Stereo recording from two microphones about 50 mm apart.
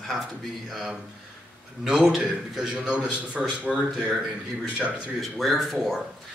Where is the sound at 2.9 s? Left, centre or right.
Centre.